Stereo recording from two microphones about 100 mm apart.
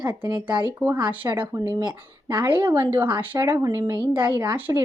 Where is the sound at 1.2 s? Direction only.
30° right (ahead or behind).